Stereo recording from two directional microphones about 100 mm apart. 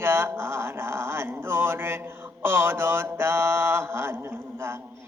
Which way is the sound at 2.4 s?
25° right (ahead or behind).